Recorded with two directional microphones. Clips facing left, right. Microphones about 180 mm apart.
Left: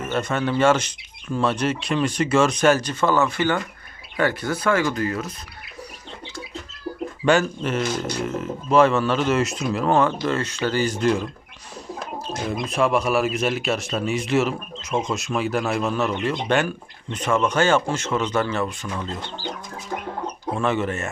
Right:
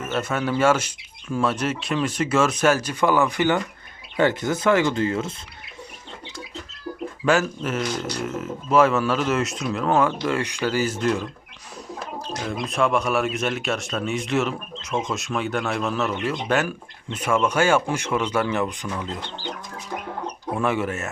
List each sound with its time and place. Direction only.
0.0 s speech: 5° right (ahead or behind); by 5.3 s 25° right (ahead or behind)
7.3 s speech: centre (ahead or behind)
10.2 s speech: 10° right (ahead or behind)
12.5 s speech: centre (ahead or behind)
20.6 s speech: 10° right (ahead or behind)